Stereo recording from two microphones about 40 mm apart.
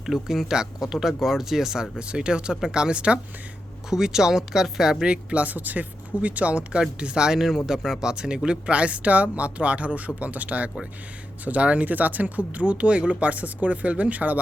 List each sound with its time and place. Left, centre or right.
0.0 s speech: centre
2.0 s speech: right
3.8 s speech: centre
5.0 s speech: right
7.0 s speech: right
7.4 s speech: centre
8.1 s speech: right